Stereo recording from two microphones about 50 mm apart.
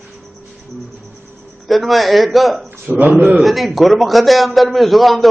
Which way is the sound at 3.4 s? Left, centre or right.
Centre.